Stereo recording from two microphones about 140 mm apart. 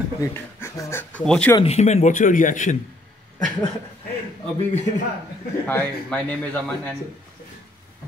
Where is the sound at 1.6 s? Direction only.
50° left (ahead or behind); by 2.7 s 65° left (ahead or behind).